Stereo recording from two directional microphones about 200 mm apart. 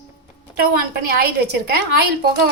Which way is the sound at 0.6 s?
50° right (ahead or behind).